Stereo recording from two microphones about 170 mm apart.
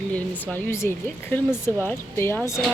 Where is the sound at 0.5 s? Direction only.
15° left (ahead or behind).